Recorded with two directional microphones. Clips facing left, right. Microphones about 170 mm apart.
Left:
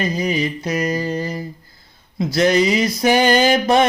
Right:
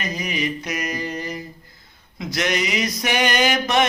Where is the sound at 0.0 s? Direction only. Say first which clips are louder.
Left 6 dB; 30° left (ahead or behind).